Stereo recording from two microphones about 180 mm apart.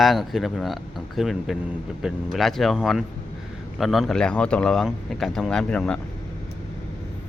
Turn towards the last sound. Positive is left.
turn(degrees=5)  # may be behind; listen again after turning